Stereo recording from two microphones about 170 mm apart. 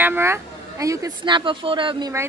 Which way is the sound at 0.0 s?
15° right (ahead or behind).